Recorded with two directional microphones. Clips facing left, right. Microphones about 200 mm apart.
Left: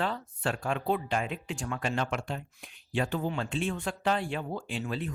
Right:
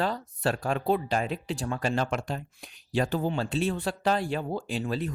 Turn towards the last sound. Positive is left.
turn(degrees=-35)  # may be behind; listen again after turning